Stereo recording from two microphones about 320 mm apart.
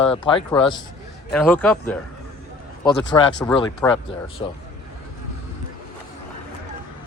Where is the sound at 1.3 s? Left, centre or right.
Centre.